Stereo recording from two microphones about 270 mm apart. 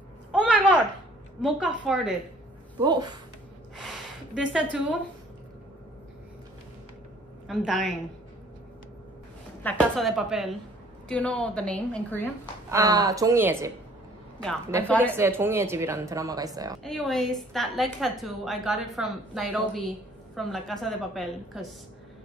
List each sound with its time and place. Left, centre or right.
0.3 s a sound: centre
1.4 s a woman's voice: centre
2.8 s speech: centre
4.4 s a woman's voice: centre
7.4 s a woman's voice: centre
9.6 s a woman's voice: centre
12.7 s speech: centre
14.9 s a woman's voice: centre
15.1 s speech: centre
16.8 s a woman's voice: centre